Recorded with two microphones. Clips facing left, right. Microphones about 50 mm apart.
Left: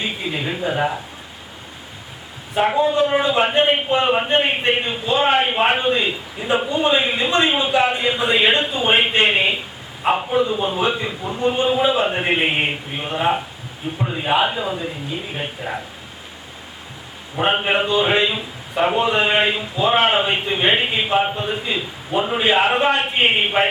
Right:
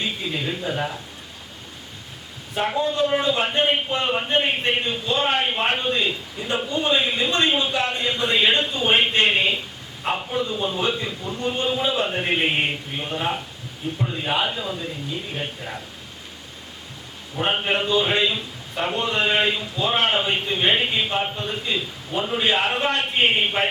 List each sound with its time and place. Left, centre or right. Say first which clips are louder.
0.0 s speech: left 2 dB; centre
2.6 s a man's voice: left 5 dB; centre
17.3 s a man's voice: left 4 dB; centre